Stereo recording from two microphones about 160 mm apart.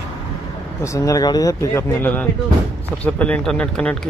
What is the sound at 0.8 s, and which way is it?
Speech, 20° left (ahead or behind).